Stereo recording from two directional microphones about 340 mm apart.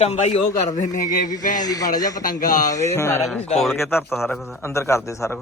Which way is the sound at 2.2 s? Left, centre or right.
Left.